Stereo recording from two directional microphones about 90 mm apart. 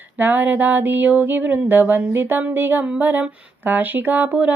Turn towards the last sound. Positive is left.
turn(degrees=-15)  # may be behind; listen again after turning